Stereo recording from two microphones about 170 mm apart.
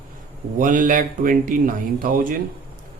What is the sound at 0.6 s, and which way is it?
Speech, 50° right (ahead or behind).